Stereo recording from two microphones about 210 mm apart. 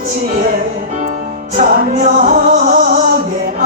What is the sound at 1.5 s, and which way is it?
Music, 40° right (ahead or behind).